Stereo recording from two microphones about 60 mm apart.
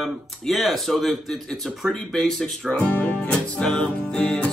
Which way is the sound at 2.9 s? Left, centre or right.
Left.